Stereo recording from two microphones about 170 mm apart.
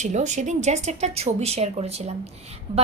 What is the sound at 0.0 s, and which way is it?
A woman's voice, 45° right (ahead or behind).